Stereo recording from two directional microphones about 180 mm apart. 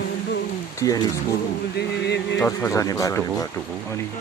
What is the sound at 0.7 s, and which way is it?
Speech, 20° left (ahead or behind).